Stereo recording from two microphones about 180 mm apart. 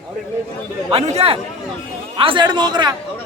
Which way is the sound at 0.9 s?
35° right (ahead or behind).